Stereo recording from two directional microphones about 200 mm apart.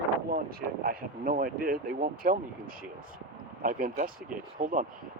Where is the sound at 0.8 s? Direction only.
45° right (ahead or behind).